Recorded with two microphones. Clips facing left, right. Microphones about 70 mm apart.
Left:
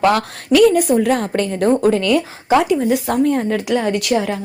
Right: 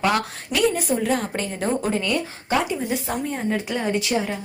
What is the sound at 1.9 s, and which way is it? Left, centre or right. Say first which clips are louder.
Speech: left 8 dB; left.